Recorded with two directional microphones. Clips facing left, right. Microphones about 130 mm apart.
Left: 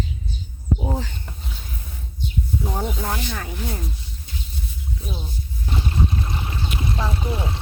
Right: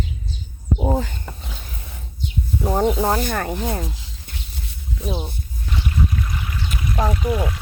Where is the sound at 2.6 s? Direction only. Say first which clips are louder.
Right 12 dB; 55° right (ahead or behind).